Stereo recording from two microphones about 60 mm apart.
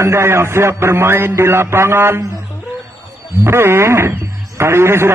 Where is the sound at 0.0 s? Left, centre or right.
Right.